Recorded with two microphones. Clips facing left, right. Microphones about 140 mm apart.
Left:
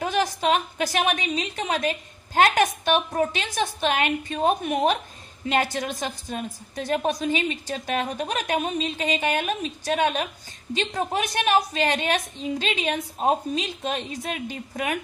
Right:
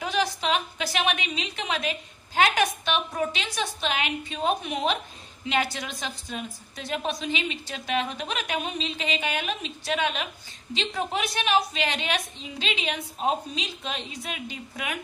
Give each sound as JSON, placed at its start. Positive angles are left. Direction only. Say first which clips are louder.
{"t": 0.0, "sound": "a woman's voice", "louder": "left 3 dB", "side_deg": 50}